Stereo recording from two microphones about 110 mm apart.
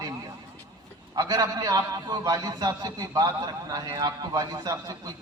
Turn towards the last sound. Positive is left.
turn(degrees=-35)  # may be behind; listen again after turning